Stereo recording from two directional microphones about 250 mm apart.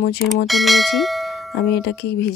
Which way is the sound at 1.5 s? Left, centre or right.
Left.